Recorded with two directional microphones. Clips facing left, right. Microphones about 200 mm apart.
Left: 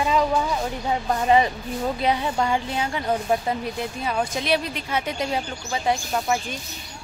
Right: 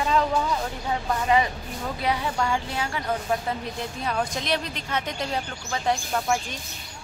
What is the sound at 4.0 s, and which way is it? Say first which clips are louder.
Speech: left 1 dB; 5° left (ahead or behind).